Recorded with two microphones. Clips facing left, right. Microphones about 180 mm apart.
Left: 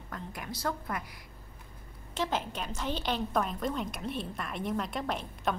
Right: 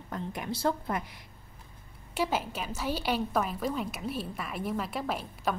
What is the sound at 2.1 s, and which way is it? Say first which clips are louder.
A woman's voice: right 2 dB; 10° right (ahead or behind).